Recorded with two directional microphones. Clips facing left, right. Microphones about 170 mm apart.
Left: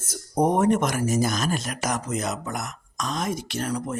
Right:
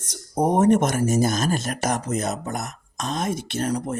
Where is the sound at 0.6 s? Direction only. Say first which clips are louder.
Right 3 dB; 50° right (ahead or behind).